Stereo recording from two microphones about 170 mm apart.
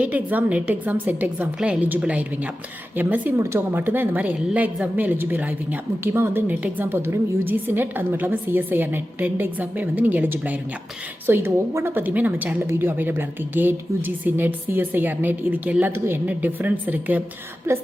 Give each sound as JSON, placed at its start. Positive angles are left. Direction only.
{"t": 0.0, "sound": "a woman's voice", "side_deg": -10}